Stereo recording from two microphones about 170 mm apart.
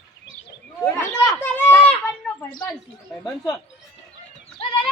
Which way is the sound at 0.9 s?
15° left (ahead or behind).